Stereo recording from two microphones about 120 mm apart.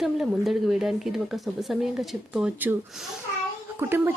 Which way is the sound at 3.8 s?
20° right (ahead or behind).